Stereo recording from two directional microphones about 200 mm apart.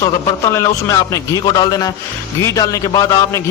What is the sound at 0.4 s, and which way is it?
A man's voice, 15° left (ahead or behind).